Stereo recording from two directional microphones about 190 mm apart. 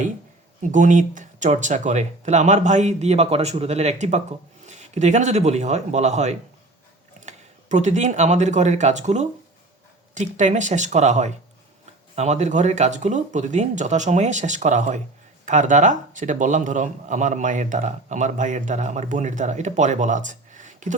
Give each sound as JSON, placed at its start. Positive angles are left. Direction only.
{"t": 0.6, "sound": "speech", "side_deg": -40}